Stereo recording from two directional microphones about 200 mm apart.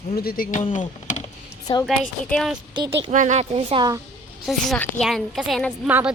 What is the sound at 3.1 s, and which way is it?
Speech, 35° right (ahead or behind).